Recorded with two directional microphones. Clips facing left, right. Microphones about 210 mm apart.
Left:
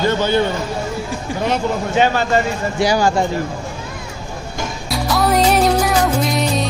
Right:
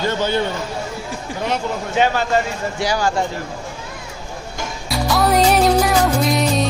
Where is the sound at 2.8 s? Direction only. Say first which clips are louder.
Left 5 dB; 15° left (ahead or behind).